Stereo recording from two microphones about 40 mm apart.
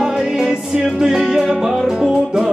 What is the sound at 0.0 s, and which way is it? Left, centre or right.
Music, centre.